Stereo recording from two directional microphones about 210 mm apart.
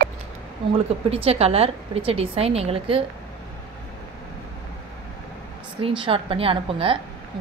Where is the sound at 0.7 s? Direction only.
30° right (ahead or behind).